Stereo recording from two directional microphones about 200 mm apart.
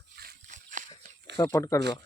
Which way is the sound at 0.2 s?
45° right (ahead or behind).